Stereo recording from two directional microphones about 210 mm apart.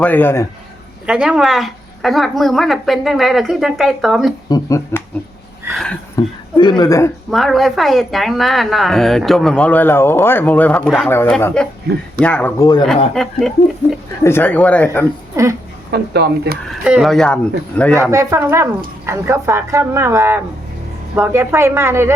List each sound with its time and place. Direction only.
0.0 s speech: 10° left (ahead or behind)
1.0 s a woman's voice: 5° right (ahead or behind)
4.4 s speech: 15° left (ahead or behind)
6.1 s a woman's voice: 20° left (ahead or behind)
7.3 s a woman's voice: centre (ahead or behind); by 12.8 s 15° left (ahead or behind)
13.2 s a woman's voice: centre (ahead or behind)
15.9 s speech: 50° right (ahead or behind)
16.6 s a woman's voice: 5° right (ahead or behind)
18.0 s speech: 15° right (ahead or behind)